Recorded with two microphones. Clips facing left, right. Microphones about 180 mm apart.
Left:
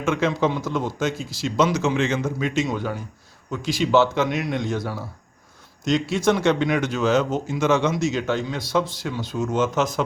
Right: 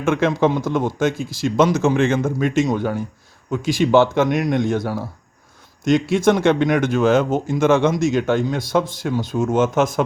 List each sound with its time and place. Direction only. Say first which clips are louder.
0.0 s speech: right 4 dB; 55° right (ahead or behind)